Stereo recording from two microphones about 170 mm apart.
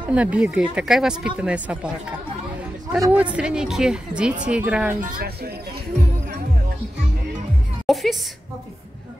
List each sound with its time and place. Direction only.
0.1 s speech: 5° right (ahead or behind)
3.1 s speech: 5° right (ahead or behind)
5.0 s speech: 60° right (ahead or behind)
7.8 s music: centre (ahead or behind)